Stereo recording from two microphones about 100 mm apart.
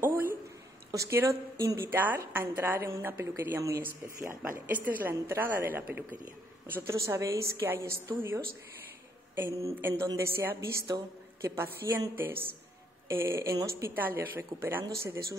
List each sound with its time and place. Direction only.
0.0 s a sound: 20° right (ahead or behind)
0.9 s a woman's voice: 30° right (ahead or behind)
9.3 s a woman's voice: 30° right (ahead or behind)